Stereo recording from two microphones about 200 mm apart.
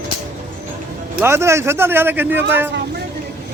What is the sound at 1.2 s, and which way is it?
Speech, 15° right (ahead or behind).